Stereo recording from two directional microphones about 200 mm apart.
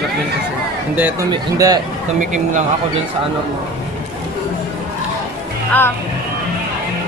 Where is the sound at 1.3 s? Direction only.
20° right (ahead or behind).